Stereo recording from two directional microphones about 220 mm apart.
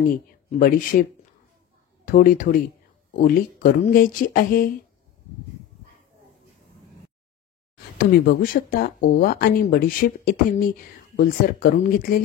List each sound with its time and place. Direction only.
0.1 s speech: 40° left (ahead or behind)
2.0 s speech: 40° left (ahead or behind)
7.7 s speech: 45° left (ahead or behind)